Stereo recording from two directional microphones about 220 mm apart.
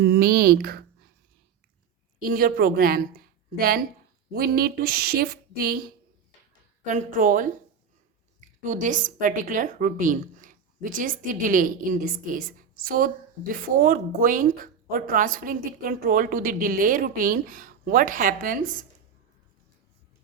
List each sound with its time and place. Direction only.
0.0 s speech: 45° right (ahead or behind)
2.2 s a woman's voice: 40° right (ahead or behind)
8.6 s a woman's voice: 35° right (ahead or behind)